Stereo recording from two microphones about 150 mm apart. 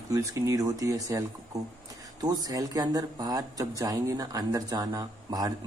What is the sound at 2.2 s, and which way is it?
Speech, 25° right (ahead or behind).